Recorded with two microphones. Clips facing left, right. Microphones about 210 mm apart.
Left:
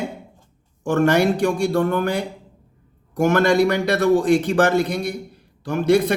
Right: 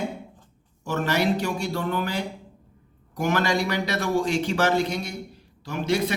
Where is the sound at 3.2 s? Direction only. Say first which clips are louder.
Left 8 dB; 50° left (ahead or behind).